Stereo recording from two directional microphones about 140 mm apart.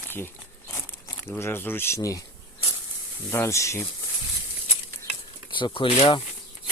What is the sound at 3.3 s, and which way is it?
Speech, 15° left (ahead or behind).